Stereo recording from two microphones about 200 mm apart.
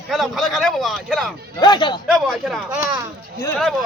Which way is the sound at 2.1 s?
Centre (ahead or behind).